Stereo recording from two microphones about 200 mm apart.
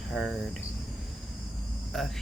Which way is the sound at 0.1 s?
5° right (ahead or behind).